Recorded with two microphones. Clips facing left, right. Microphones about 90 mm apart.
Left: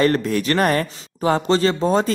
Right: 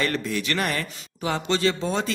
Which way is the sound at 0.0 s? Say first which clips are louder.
Left 8 dB; 45° left (ahead or behind).